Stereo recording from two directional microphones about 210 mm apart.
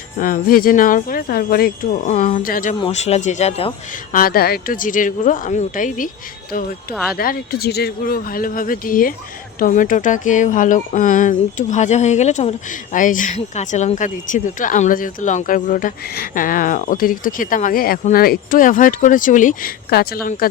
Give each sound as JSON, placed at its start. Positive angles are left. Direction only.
{"t": 0.2, "sound": "speech", "side_deg": 40}
{"t": 2.7, "sound": "speech", "side_deg": 30}
{"t": 4.1, "sound": "speech", "side_deg": 45}
{"t": 6.9, "sound": "speech", "side_deg": 0}
{"t": 7.2, "sound": "speech", "side_deg": 45}